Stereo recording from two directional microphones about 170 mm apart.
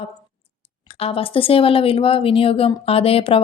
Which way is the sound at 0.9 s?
35° left (ahead or behind).